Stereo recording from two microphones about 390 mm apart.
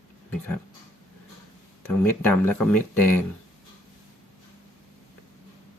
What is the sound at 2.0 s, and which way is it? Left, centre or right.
Speech, centre.